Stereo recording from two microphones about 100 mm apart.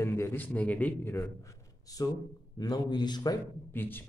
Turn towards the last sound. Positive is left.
turn(degrees=20)  # may be behind; listen again after turning